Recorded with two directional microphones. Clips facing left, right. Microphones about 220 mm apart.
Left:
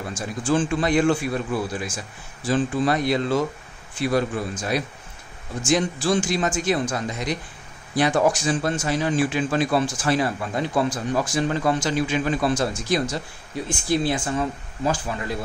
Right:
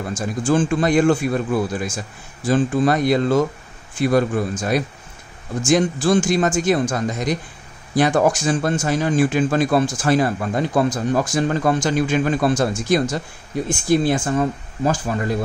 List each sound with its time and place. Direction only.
0.4 s a man's voice: 45° right (ahead or behind)